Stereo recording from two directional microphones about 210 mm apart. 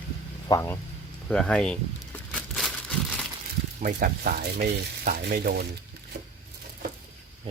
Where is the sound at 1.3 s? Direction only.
5° left (ahead or behind).